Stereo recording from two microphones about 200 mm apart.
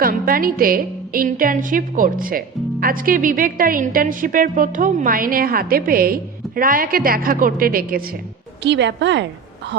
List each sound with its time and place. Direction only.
0.0 s a woman's voice: 45° right (ahead or behind)
8.6 s a woman's voice: 60° right (ahead or behind)